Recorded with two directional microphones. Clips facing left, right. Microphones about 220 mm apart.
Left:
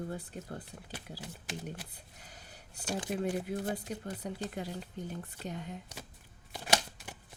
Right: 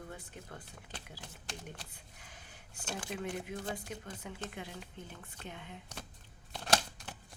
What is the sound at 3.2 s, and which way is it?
Speech, 35° left (ahead or behind).